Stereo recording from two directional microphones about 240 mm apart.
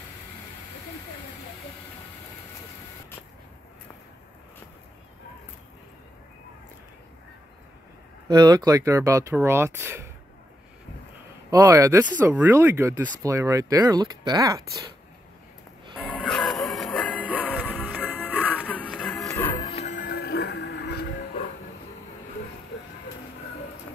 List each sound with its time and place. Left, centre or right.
8.3 s speech: centre
11.5 s speech: centre
16.2 s music: centre
18.5 s music: centre
19.3 s music: centre; by 21.1 s left